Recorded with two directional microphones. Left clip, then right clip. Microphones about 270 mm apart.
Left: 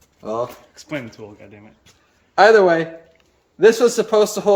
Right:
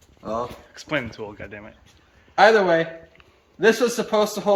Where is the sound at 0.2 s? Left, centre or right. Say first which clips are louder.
Left 3 dB; left.